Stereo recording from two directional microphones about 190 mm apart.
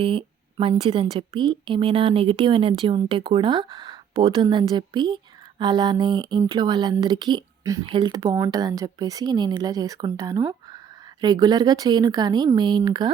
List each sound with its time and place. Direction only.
0.0 s a woman's voice: 30° right (ahead or behind)